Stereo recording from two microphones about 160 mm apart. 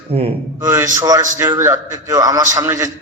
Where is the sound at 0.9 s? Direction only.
25° right (ahead or behind).